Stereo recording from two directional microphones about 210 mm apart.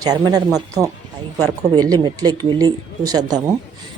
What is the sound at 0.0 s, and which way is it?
Speech, 20° right (ahead or behind).